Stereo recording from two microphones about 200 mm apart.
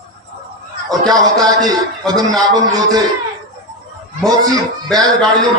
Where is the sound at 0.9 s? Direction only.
20° right (ahead or behind).